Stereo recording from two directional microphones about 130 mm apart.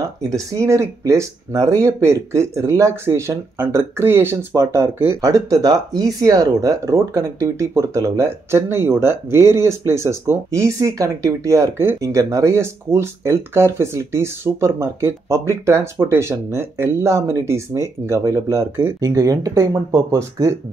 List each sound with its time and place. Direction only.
0.2 s speech: 25° right (ahead or behind)